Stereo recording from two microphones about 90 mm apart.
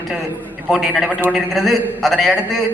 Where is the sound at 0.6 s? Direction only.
5° right (ahead or behind).